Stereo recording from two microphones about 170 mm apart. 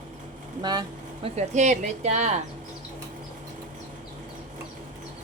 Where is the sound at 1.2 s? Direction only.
40° right (ahead or behind).